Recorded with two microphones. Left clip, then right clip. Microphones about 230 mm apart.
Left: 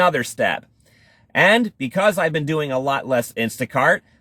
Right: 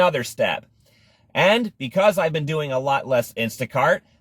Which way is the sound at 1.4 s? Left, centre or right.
Centre.